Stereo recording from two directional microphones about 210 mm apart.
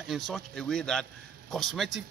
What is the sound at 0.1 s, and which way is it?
A man's voice, centre (ahead or behind).